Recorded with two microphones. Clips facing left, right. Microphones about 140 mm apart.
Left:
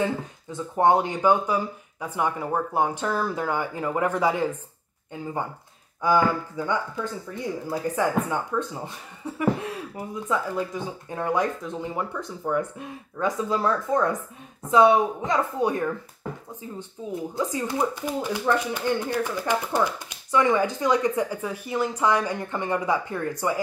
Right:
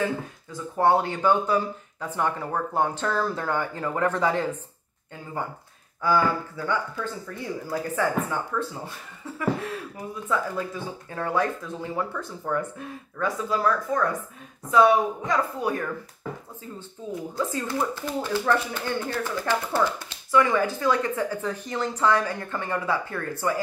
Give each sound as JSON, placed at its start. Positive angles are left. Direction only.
{"t": 0.0, "sound": "speech", "side_deg": 20}
{"t": 6.0, "sound": "speech", "side_deg": 15}
{"t": 17.0, "sound": "speech", "side_deg": 15}